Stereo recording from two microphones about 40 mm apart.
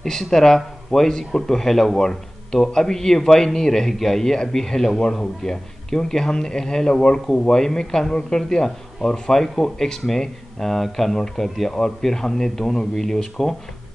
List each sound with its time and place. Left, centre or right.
0.0 s a man's voice: centre